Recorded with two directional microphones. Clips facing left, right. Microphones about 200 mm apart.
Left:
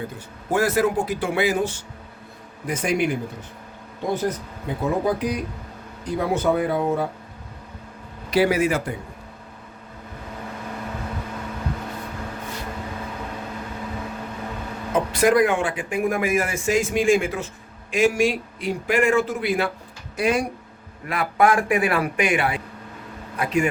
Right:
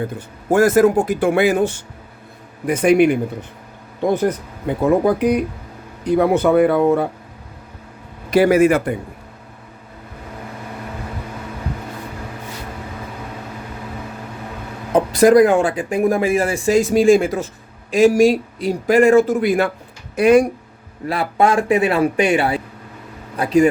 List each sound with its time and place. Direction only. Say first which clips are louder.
0.5 s speech: right 8 dB; 45° right (ahead or behind)
8.3 s speech: right 7 dB; 50° right (ahead or behind)
14.9 s speech: right 7 dB; 35° right (ahead or behind)
20.1 s speech: right 10 dB; 60° right (ahead or behind)
21.1 s a man's voice: right 3 dB; 30° right (ahead or behind)